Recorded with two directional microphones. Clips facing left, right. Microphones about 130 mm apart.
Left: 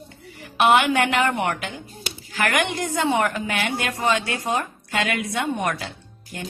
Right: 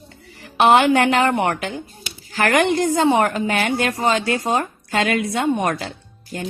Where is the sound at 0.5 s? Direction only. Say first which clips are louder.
Right 4 dB; 35° right (ahead or behind).